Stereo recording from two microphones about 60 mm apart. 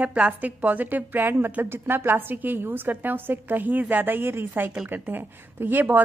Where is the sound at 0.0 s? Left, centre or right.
Right.